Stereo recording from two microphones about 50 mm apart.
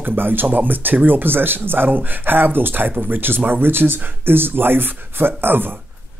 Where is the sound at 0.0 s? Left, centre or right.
Right.